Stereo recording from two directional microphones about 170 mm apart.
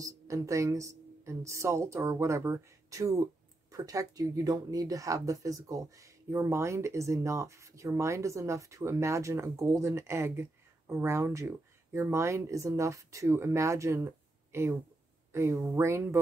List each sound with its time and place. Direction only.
0.0 s speech: 20° right (ahead or behind)